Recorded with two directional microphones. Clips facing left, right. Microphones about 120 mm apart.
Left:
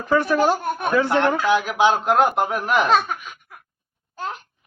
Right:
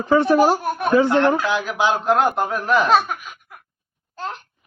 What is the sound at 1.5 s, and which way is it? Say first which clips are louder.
A man's voice: left 3 dB; 10° left (ahead or behind).